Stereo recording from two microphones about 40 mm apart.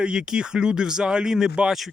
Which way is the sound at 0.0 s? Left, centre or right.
Centre.